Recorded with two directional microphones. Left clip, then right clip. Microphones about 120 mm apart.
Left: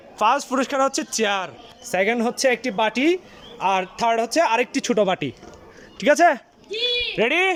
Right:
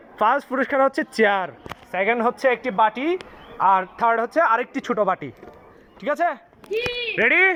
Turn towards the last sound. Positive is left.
turn(degrees=25)  # may be behind; listen again after turning